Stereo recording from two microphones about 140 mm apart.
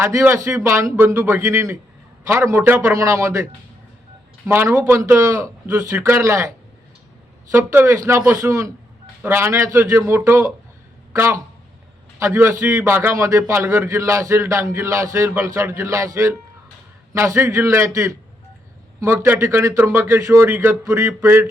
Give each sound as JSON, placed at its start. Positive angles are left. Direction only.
{"t": 0.0, "sound": "a man's voice", "side_deg": -15}
{"t": 4.4, "sound": "a man's voice", "side_deg": -15}
{"t": 7.5, "sound": "a man's voice", "side_deg": -15}